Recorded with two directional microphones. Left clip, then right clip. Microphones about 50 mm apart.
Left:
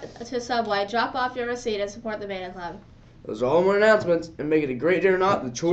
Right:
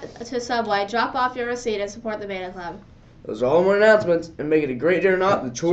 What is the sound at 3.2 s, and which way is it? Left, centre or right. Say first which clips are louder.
Speech: right 3 dB; centre.